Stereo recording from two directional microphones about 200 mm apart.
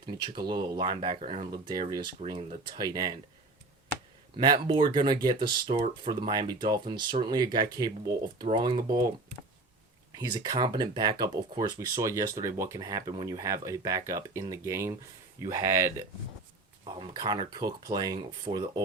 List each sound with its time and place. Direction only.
0.0 s speech: 20° right (ahead or behind)
4.4 s speech: 20° right (ahead or behind)
10.2 s speech: 20° right (ahead or behind)
16.8 s speech: 25° right (ahead or behind)